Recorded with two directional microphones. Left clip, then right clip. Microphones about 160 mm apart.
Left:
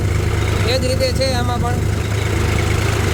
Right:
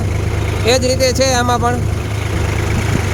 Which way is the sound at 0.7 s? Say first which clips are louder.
Right 7 dB; 35° right (ahead or behind).